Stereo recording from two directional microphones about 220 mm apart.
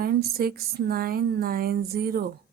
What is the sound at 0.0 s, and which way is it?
Speech, 45° right (ahead or behind).